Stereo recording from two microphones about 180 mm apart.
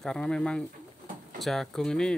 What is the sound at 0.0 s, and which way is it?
Speech, 5° left (ahead or behind).